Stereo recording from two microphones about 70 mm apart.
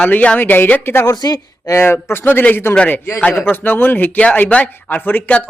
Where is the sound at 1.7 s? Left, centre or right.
Left.